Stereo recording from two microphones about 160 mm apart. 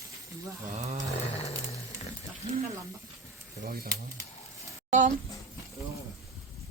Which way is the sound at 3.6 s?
70° right (ahead or behind).